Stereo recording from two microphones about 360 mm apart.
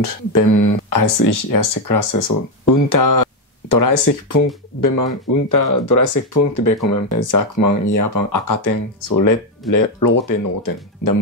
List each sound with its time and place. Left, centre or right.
0.0 s speech: left